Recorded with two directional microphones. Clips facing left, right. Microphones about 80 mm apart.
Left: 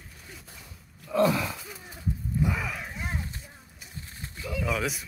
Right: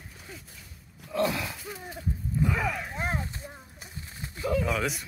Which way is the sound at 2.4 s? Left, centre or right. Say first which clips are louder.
Right 3 dB; centre.